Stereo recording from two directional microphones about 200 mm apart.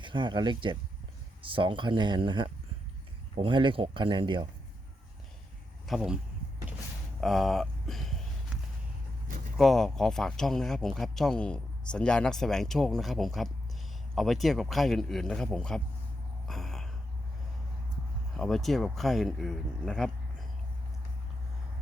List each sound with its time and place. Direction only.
0.0 s speech: 25° right (ahead or behind)
5.9 s speech: 5° right (ahead or behind)
7.2 s speech: centre (ahead or behind)
9.6 s speech: centre (ahead or behind)
16.5 s a sound: centre (ahead or behind)
18.3 s speech: centre (ahead or behind)